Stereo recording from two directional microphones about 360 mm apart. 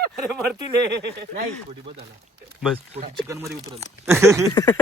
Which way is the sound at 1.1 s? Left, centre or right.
Right.